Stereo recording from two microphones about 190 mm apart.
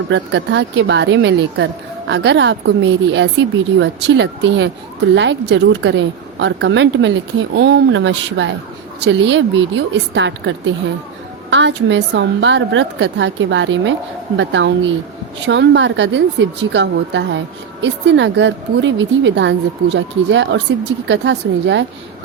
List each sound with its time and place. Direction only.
0.1 s speech: 65° right (ahead or behind)
11.5 s speech: 70° right (ahead or behind)